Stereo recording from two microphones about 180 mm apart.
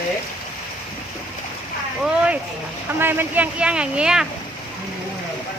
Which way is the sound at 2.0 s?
5° right (ahead or behind).